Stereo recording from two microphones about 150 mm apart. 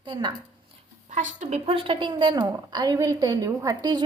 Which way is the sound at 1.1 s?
50° right (ahead or behind).